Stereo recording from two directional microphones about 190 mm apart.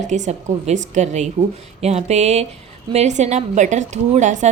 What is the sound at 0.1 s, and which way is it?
A woman's voice, 35° right (ahead or behind).